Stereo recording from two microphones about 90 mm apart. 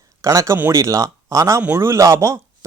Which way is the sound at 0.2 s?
35° right (ahead or behind).